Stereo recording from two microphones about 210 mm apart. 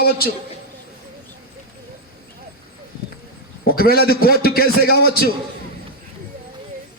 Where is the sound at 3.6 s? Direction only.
45° left (ahead or behind).